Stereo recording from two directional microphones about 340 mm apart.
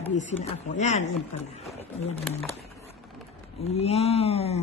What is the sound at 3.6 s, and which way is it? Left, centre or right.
Speech, centre.